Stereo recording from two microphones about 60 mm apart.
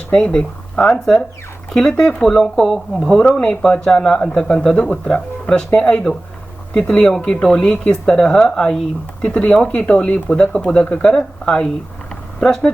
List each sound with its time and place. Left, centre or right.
0.1 s speech: centre